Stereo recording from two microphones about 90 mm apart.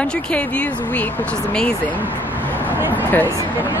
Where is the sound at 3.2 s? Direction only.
25° right (ahead or behind).